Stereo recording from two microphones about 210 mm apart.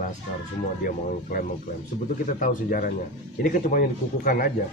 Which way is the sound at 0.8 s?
45° left (ahead or behind).